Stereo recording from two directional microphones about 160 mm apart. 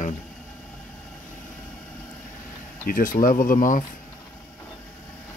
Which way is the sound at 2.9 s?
60° left (ahead or behind).